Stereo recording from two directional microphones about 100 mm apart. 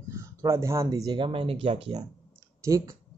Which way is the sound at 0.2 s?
30° right (ahead or behind).